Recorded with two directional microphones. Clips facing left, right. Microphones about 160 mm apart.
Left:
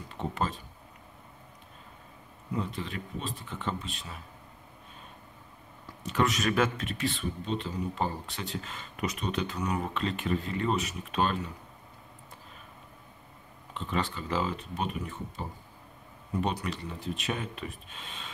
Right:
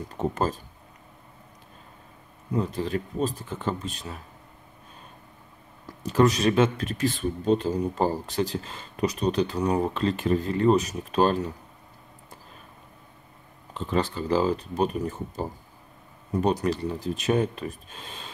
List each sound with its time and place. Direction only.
0.1 s speech: 45° right (ahead or behind)
2.5 s speech: 40° right (ahead or behind)
6.0 s speech: 35° right (ahead or behind)
6.8 s speech: 40° right (ahead or behind)
13.7 s speech: 40° right (ahead or behind)